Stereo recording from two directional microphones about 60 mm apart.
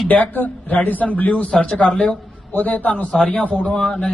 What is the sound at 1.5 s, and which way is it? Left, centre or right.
Speech, centre.